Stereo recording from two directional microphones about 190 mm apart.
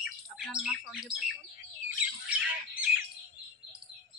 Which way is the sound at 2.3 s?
5° right (ahead or behind).